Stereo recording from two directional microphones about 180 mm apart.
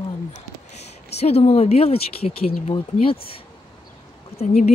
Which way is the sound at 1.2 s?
35° left (ahead or behind).